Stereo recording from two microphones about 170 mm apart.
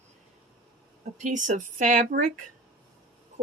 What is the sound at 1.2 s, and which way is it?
Speech, 50° right (ahead or behind).